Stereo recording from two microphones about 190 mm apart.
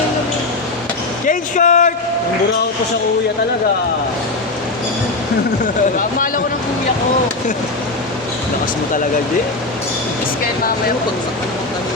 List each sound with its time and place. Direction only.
1.3 s speech: 40° left (ahead or behind)
6.0 s speech: 45° left (ahead or behind)